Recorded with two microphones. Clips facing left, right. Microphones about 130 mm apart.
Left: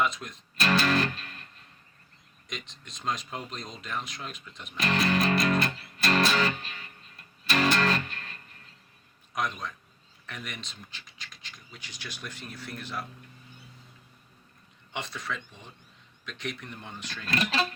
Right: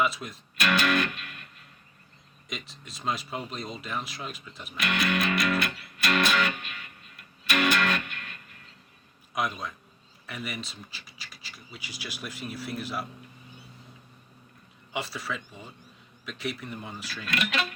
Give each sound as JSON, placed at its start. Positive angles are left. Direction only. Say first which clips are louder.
{"t": 0.0, "sound": "speech", "louder": "right 1 dB", "side_deg": -5}
{"t": 0.6, "sound": "music", "louder": "even", "side_deg": 35}
{"t": 2.5, "sound": "speech", "louder": "right 2 dB", "side_deg": -5}
{"t": 4.8, "sound": "music", "louder": "left 2 dB", "side_deg": 30}
{"t": 9.3, "sound": "a man's voice", "louder": "right 1 dB", "side_deg": -10}
{"t": 14.9, "sound": "speech", "louder": "right 2 dB", "side_deg": -5}
{"t": 17.2, "sound": "speech", "louder": "left 2 dB", "side_deg": 30}